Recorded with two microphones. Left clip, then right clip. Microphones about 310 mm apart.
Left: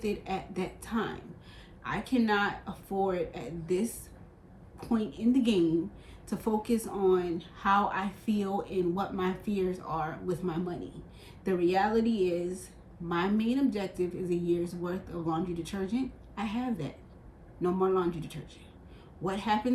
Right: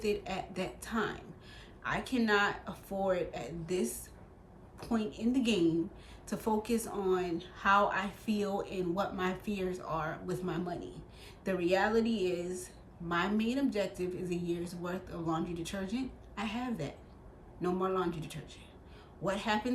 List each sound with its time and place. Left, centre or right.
0.0 s a woman's voice: centre